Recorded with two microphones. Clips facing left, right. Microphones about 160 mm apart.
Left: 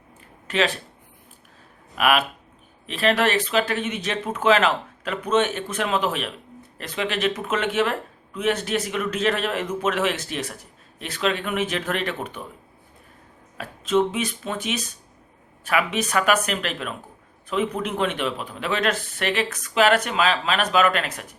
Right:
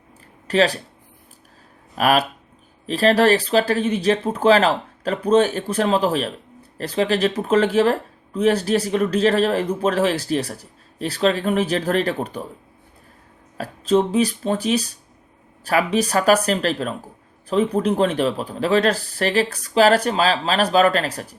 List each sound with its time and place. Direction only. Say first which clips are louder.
0.4 s speech: right 5 dB; 35° right (ahead or behind)
2.0 s speech: right 3 dB; 40° right (ahead or behind)
13.6 s speech: right 3 dB; 35° right (ahead or behind)